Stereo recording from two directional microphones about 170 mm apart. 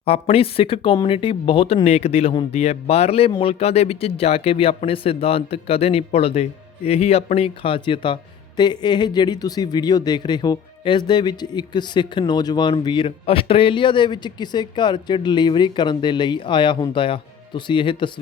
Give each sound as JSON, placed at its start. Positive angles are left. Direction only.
{"t": 0.0, "sound": "speech", "side_deg": 35}